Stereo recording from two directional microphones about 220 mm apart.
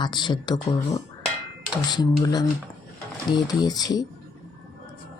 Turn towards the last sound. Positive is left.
turn(degrees=15)  # may be behind; listen again after turning